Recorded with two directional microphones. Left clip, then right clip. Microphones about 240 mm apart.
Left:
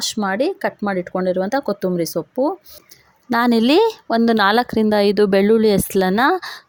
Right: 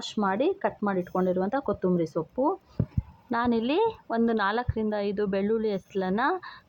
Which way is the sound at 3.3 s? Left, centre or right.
Left.